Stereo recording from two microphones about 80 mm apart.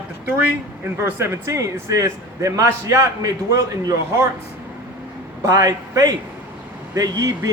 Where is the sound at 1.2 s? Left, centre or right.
Right.